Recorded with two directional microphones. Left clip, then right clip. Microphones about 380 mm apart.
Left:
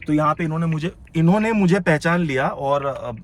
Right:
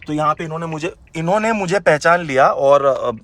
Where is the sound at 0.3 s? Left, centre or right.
Centre.